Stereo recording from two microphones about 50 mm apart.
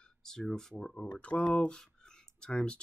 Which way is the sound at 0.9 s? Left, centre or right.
Left.